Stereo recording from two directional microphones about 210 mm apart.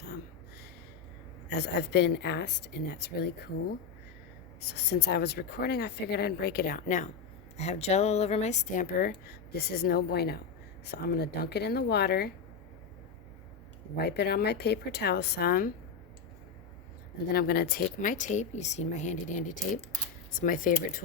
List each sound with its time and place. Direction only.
1.5 s a woman's voice: 50° left (ahead or behind)
13.9 s speech: 50° left (ahead or behind)
17.3 s a woman's voice: 50° left (ahead or behind)